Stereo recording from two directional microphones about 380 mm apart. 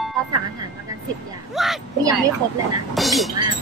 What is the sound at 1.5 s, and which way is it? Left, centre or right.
A woman's voice, centre.